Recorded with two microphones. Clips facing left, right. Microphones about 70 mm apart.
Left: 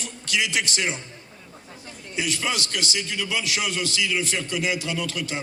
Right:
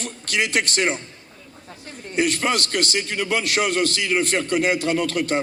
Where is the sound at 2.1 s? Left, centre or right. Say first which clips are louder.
Right 6 dB; right.